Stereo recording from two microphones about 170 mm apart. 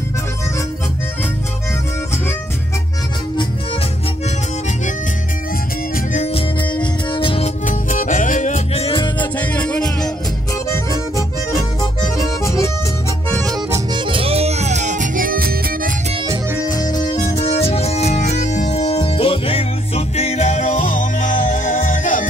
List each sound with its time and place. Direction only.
6.1 s music: 40° left (ahead or behind)
7.6 s music: 50° left (ahead or behind); by 9.3 s 30° left (ahead or behind)
9.4 s music: 10° left (ahead or behind)
10.7 s accordion: 20° left (ahead or behind)
12.4 s music: 15° left (ahead or behind)
13.5 s music: 30° right (ahead or behind); by 15.9 s 55° right (ahead or behind)
16.9 s music: 20° left (ahead or behind)
17.4 s music: 35° left (ahead or behind); by 22.2 s 50° left (ahead or behind)